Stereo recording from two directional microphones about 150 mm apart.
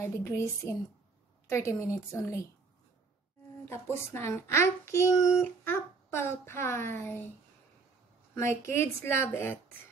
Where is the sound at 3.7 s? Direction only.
15° left (ahead or behind).